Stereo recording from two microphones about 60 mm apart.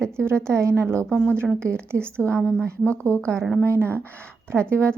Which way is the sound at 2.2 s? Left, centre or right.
Left.